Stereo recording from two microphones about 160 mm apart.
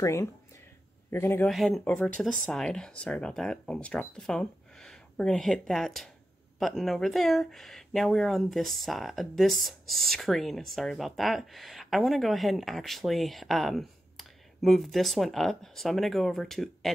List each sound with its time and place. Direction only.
0.0 s a man's voice: 15° left (ahead or behind)
1.5 s speech: centre (ahead or behind)